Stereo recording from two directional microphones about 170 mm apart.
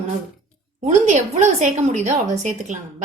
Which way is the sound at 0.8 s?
45° right (ahead or behind).